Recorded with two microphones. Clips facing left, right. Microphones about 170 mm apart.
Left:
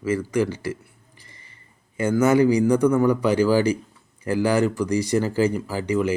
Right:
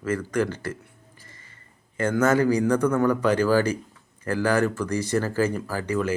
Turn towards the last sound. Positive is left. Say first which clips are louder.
# left 3 dB
turn(degrees=15)  # may be behind; listen again after turning